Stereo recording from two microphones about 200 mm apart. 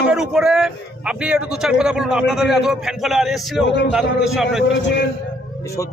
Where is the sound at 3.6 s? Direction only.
60° left (ahead or behind).